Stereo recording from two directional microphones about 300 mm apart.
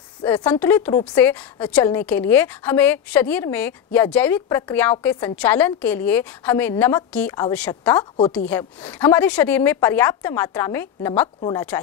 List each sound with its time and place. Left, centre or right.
0.2 s a woman's voice: centre